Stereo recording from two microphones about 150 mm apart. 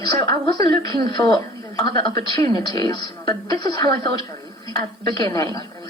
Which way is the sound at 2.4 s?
25° left (ahead or behind).